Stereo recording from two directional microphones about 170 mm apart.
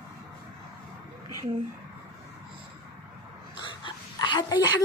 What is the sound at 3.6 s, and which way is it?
Dog, 25° left (ahead or behind).